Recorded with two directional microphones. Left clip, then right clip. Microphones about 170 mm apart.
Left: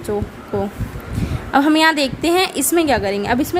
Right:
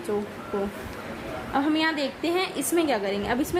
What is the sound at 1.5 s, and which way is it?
A woman's voice, 60° left (ahead or behind).